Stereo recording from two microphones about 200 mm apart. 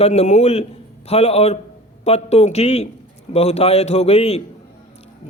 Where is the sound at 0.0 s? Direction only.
35° left (ahead or behind).